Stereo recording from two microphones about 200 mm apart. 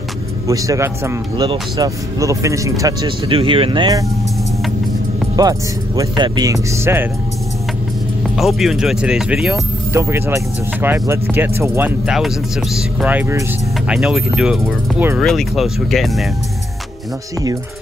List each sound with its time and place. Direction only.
0.5 s speech: 15° right (ahead or behind)
5.3 s speech: 15° right (ahead or behind)
8.4 s speech: centre (ahead or behind)